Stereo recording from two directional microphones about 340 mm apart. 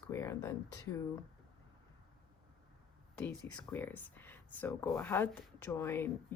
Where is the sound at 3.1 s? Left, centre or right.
Centre.